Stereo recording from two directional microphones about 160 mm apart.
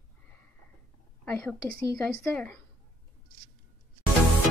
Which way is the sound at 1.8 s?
20° left (ahead or behind).